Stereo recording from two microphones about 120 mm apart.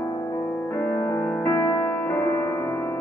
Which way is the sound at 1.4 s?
25° left (ahead or behind).